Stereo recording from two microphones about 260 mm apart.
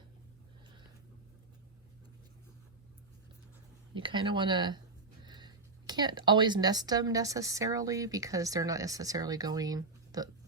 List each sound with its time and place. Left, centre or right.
3.9 s speech: centre